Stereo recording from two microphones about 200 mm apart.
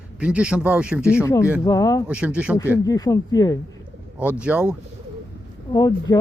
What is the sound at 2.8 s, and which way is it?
Speech, 20° left (ahead or behind).